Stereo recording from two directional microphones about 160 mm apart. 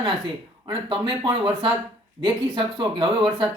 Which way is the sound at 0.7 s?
30° right (ahead or behind).